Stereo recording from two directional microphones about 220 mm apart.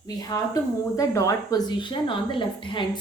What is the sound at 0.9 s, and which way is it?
A woman's voice, 15° left (ahead or behind).